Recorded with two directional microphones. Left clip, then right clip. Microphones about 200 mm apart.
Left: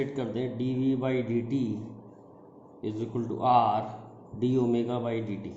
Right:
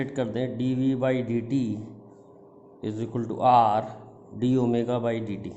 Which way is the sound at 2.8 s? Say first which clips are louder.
Right 2 dB; 45° right (ahead or behind).